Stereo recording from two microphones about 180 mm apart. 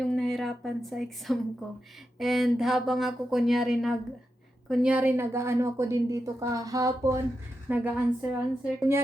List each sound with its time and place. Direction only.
0.1 s a woman's voice: centre (ahead or behind); by 7.2 s 20° right (ahead or behind)
7.7 s a woman's voice: 5° right (ahead or behind)